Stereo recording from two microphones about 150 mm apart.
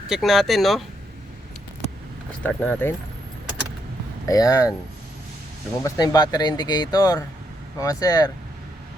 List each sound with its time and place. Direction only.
0.1 s speech: centre (ahead or behind)
2.4 s speech: 10° left (ahead or behind)
4.3 s speech: 20° left (ahead or behind)
5.8 s speech: 25° left (ahead or behind)